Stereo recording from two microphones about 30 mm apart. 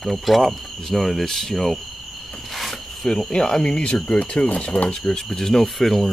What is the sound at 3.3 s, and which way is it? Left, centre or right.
Speech, left.